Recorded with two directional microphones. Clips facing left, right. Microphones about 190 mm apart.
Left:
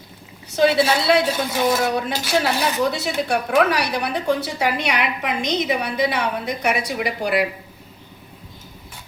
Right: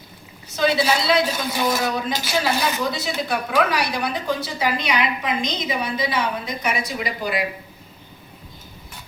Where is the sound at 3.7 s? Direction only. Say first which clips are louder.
Left 2 dB; 65° left (ahead or behind).